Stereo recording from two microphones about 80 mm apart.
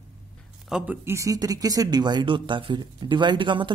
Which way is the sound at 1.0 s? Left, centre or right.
Right.